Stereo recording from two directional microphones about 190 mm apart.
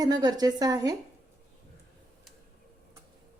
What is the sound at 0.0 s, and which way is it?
Speech, 20° right (ahead or behind).